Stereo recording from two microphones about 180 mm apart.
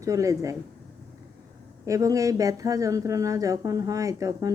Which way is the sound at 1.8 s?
20° right (ahead or behind).